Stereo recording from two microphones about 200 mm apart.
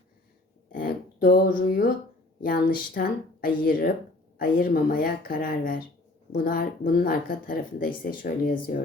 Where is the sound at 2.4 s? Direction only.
45° left (ahead or behind).